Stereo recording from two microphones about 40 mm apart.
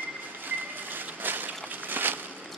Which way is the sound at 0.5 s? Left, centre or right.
Right.